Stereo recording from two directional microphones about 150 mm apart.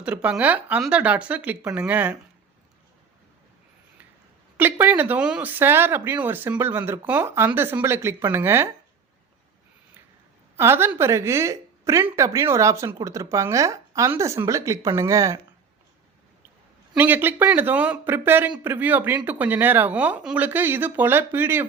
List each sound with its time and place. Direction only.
0.0 s speech: 10° right (ahead or behind)
4.5 s speech: 10° right (ahead or behind)
10.6 s a woman's voice: 15° right (ahead or behind)
16.9 s speech: 10° right (ahead or behind)